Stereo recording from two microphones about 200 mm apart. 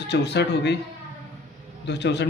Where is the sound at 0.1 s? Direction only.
60° left (ahead or behind).